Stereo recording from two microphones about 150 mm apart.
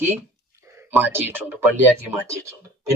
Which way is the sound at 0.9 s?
15° right (ahead or behind).